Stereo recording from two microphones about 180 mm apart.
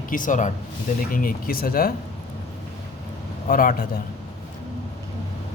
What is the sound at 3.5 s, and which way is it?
Speech, 50° left (ahead or behind).